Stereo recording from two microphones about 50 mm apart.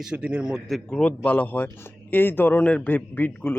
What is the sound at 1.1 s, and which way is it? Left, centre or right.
Speech, left.